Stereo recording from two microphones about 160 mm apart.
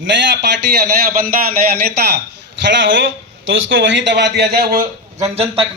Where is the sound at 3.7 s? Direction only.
90° right; by 4.9 s 70° right (ahead or behind).